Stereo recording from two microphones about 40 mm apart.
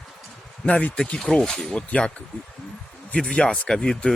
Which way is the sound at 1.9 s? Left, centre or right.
Left.